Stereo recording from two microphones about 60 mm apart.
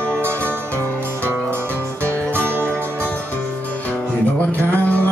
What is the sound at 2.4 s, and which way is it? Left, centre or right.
Music, right.